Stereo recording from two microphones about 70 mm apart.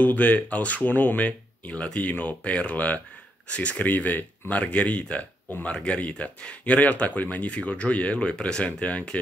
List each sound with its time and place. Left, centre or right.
0.0 s speech: left